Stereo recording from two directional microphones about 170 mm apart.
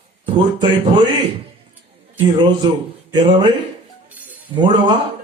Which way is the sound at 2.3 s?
25° right (ahead or behind).